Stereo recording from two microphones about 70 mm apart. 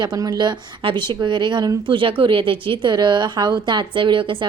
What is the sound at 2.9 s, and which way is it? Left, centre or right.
Speech, right.